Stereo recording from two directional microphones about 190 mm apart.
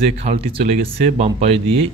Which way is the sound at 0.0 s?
30° right (ahead or behind).